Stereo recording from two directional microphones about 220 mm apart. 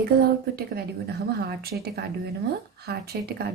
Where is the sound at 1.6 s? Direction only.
45° right (ahead or behind).